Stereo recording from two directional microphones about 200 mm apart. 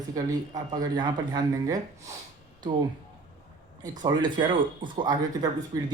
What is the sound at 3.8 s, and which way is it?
Speech, 20° right (ahead or behind).